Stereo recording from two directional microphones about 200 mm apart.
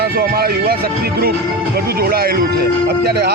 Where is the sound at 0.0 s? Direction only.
50° right (ahead or behind).